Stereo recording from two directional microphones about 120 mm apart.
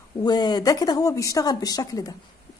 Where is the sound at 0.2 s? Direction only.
35° left (ahead or behind).